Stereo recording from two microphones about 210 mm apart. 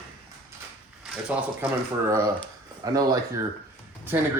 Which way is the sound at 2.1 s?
15° right (ahead or behind).